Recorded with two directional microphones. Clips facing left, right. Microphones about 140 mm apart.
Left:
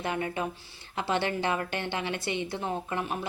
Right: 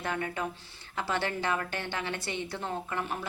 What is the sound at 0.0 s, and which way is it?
A woman's voice, 20° left (ahead or behind).